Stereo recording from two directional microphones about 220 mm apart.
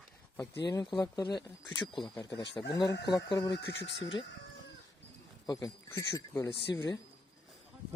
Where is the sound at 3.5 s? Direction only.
50° left (ahead or behind).